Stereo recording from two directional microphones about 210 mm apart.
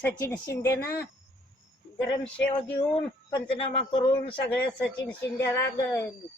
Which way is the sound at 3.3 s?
25° left (ahead or behind).